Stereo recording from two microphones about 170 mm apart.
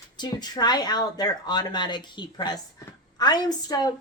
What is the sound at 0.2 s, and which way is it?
A woman's voice, 25° left (ahead or behind).